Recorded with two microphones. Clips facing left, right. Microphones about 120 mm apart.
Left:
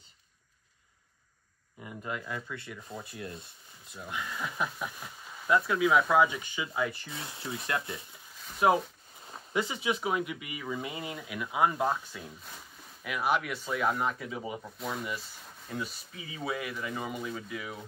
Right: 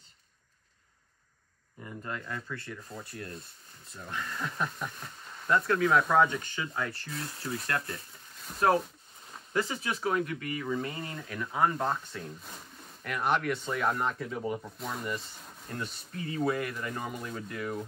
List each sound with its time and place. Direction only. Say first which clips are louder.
1.8 s speech: left 1 dB; 10° left (ahead or behind)
3.0 s speech: even; 20° left (ahead or behind)
3.9 s speech: even; 5° left (ahead or behind)
7.3 s speech: even; 25° left (ahead or behind)
7.9 s a sound: even; centre (ahead or behind)
9.5 s speech: left 1 dB; 5° left (ahead or behind)